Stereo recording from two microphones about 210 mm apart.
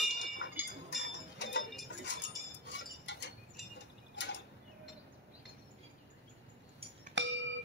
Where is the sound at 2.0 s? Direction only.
60° left (ahead or behind).